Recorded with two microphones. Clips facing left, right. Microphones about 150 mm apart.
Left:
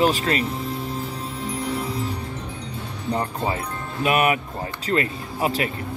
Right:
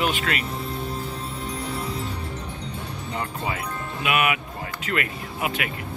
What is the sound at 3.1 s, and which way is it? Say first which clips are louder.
Speech: left 5 dB; 35° left (ahead or behind).